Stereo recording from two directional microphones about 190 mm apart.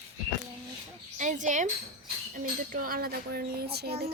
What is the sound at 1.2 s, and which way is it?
Speech, 40° right (ahead or behind).